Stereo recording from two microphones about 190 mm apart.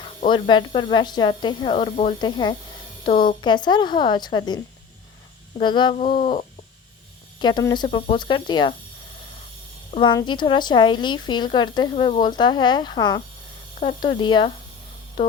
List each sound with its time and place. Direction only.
0.3 s a woman's voice: 25° left (ahead or behind)
9.9 s speech: 25° left (ahead or behind)